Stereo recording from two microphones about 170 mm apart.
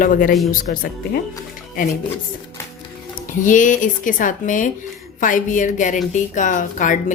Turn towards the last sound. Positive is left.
turn(degrees=50)  # may be behind; listen again after turning